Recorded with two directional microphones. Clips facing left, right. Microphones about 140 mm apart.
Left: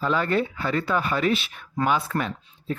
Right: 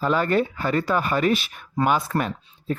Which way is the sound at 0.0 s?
40° right (ahead or behind).